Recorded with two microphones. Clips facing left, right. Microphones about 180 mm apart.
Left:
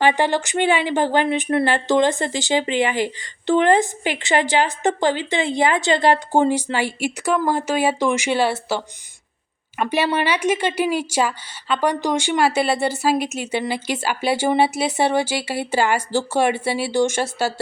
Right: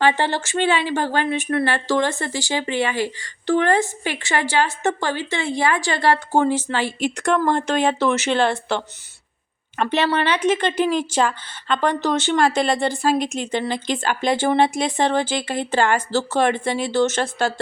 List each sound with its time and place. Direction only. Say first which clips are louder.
0.0 s a woman's voice: left 2 dB; 15° left (ahead or behind)